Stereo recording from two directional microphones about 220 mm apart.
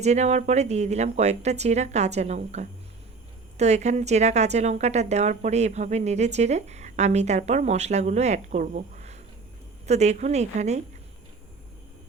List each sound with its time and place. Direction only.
0.0 s a woman's voice: 30° right (ahead or behind)